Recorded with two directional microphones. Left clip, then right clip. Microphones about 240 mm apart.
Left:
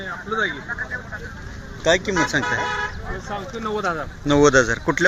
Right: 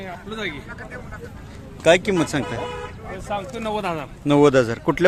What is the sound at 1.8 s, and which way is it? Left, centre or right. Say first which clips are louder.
Speech: right 3 dB; right.